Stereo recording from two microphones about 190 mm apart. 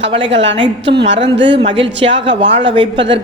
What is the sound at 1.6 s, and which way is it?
Speech, 30° right (ahead or behind).